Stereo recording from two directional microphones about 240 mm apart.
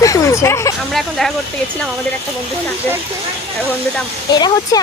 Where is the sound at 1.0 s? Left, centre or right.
Centre.